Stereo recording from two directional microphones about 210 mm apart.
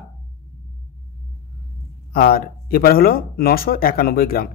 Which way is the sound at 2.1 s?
45° left (ahead or behind).